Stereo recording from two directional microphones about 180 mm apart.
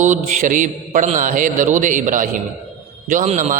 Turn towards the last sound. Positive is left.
turn(degrees=-45)  # may be behind; listen again after turning